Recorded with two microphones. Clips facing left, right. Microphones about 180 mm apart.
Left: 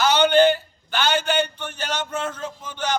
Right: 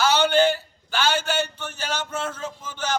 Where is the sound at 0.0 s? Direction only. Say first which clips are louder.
Left 3 dB; 5° right (ahead or behind).